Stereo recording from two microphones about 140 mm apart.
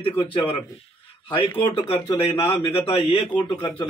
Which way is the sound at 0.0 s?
40° left (ahead or behind).